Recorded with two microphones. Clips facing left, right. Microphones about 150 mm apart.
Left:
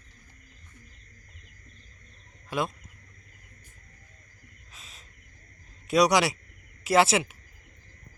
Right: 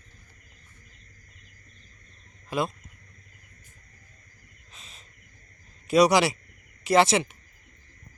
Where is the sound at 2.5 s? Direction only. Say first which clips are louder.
Right 2 dB; centre (ahead or behind).